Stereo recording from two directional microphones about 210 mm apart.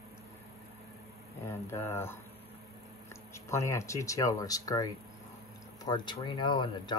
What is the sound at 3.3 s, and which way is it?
Speech, 15° left (ahead or behind).